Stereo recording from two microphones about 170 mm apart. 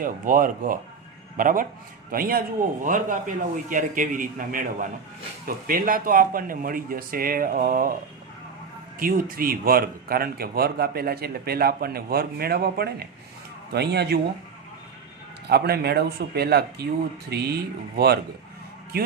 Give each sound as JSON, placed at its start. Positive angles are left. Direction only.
{"t": 0.0, "sound": "a man's voice", "side_deg": -55}
{"t": 9.0, "sound": "speech", "side_deg": -55}
{"t": 15.4, "sound": "speech", "side_deg": -70}